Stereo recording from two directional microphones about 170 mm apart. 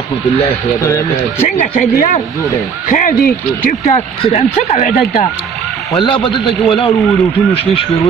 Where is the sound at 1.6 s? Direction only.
50° left (ahead or behind).